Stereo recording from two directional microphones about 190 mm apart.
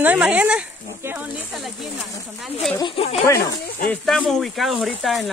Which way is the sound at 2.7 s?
25° left (ahead or behind).